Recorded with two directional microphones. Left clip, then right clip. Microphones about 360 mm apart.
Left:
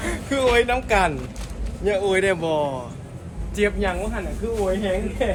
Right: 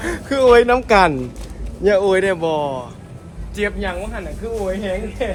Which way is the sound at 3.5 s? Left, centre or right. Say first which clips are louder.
Even; centre.